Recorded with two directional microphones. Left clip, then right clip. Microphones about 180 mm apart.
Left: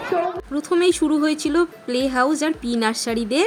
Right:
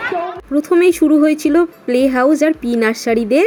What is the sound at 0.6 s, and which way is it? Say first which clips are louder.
A woman's voice: right 7 dB; 15° right (ahead or behind).